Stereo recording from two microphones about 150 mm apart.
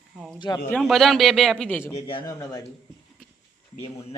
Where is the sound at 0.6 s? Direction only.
5° left (ahead or behind).